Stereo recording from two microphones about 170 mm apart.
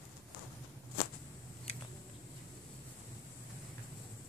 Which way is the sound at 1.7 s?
40° left (ahead or behind).